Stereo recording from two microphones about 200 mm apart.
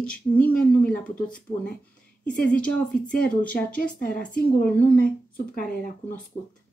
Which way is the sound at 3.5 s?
45° left (ahead or behind).